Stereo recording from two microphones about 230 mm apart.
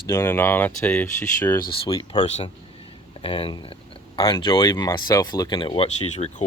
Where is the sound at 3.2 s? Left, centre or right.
Left.